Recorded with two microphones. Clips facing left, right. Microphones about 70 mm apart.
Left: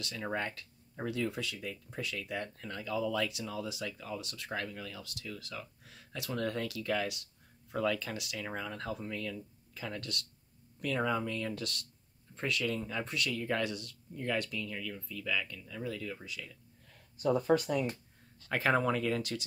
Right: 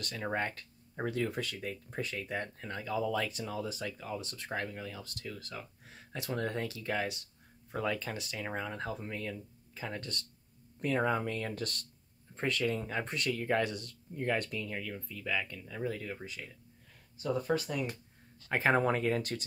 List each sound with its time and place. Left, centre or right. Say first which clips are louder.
0.2 s speech: right 2 dB; right
17.2 s speech: left 4 dB; centre
18.5 s speech: right 1 dB; right